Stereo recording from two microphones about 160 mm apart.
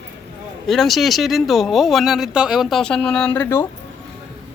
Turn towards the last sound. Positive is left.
turn(degrees=15)  # may be behind; listen again after turning